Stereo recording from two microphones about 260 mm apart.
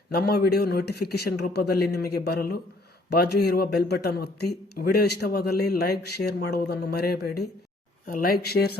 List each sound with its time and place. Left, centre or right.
0.1 s a man's voice: left